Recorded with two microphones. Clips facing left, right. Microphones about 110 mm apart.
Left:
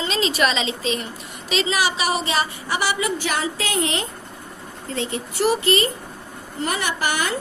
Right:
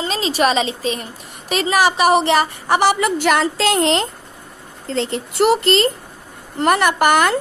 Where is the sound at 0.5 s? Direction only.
45° right (ahead or behind).